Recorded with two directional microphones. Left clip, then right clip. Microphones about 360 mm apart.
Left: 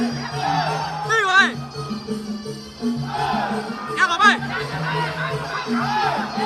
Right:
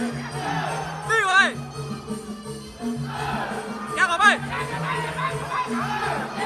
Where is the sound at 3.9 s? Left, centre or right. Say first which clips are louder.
Left 2 dB; centre.